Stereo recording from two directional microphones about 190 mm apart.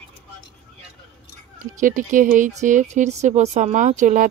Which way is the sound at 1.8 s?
45° right (ahead or behind).